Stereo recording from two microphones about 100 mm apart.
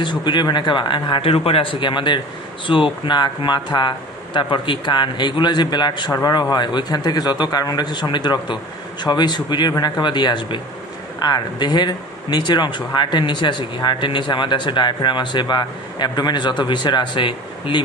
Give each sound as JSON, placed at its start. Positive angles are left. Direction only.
{"t": 0.0, "sound": "speech", "side_deg": 50}
{"t": 1.3, "sound": "speech", "side_deg": 70}